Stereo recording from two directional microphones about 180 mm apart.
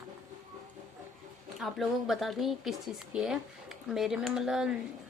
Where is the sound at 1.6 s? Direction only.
Centre (ahead or behind).